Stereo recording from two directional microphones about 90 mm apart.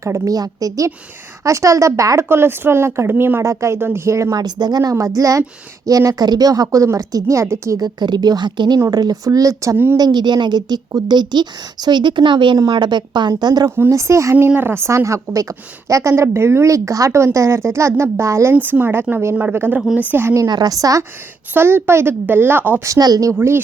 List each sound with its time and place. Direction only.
0.0 s a woman's voice: 40° right (ahead or behind)
7.8 s a woman's voice: 50° right (ahead or behind)
8.9 s a woman's voice: 45° right (ahead or behind)
9.7 s a woman's voice: 25° right (ahead or behind)
10.0 s a woman's voice: 55° right (ahead or behind)
12.5 s a woman's voice: 50° right (ahead or behind)
13.7 s a woman's voice: 25° right (ahead or behind)
14.3 s a woman's voice: 20° right (ahead or behind)
18.5 s a woman's voice: 20° right (ahead or behind)
20.5 s a woman's voice: 45° right (ahead or behind)
21.5 s a woman's voice: 25° right (ahead or behind)
22.8 s a woman's voice: 40° right (ahead or behind)
23.3 s a woman's voice: 30° right (ahead or behind)